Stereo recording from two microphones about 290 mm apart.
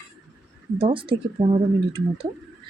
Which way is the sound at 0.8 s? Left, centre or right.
Centre.